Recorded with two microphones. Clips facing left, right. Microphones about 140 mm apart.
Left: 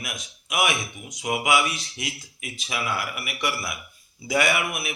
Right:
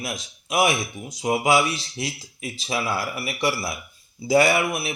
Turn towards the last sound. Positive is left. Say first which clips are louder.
# right 4 dB
turn(degrees=-30)  # may be behind; listen again after turning